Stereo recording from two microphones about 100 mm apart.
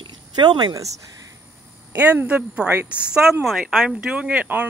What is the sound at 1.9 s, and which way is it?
Speech, 15° right (ahead or behind).